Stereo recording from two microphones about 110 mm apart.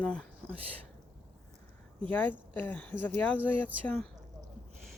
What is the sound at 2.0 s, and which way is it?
Speech, 15° left (ahead or behind).